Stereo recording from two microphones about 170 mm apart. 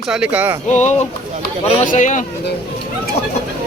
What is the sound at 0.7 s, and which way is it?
Speech, 45° left (ahead or behind).